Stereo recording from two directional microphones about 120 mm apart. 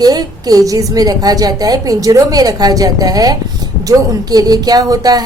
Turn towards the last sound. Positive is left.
turn(degrees=-30)  # may be behind; listen again after turning